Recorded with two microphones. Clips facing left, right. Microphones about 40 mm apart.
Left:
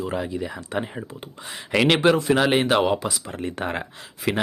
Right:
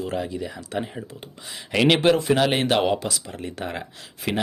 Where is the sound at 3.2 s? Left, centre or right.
Left.